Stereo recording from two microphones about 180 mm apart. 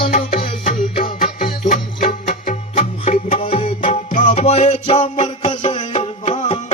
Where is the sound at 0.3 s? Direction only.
45° left (ahead or behind).